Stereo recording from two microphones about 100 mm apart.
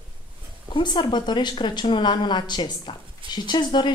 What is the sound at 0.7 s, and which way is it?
A woman's voice, 50° left (ahead or behind).